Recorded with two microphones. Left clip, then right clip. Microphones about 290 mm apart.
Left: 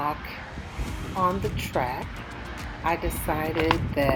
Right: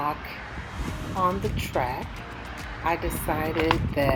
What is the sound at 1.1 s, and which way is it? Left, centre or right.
Speech, centre.